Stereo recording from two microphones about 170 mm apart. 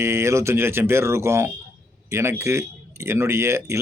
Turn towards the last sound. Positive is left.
turn(degrees=-15)  # may be behind; listen again after turning